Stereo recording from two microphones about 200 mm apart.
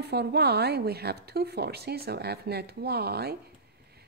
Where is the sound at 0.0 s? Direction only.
55° right (ahead or behind).